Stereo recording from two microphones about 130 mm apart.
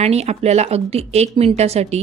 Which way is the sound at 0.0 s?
55° right (ahead or behind).